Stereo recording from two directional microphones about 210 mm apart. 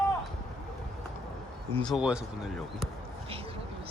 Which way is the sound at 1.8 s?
5° right (ahead or behind).